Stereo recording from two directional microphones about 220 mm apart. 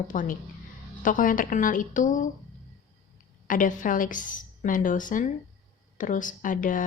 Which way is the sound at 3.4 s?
35° left (ahead or behind).